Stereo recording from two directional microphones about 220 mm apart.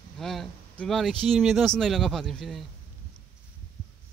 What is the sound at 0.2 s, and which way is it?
Speech, centre (ahead or behind).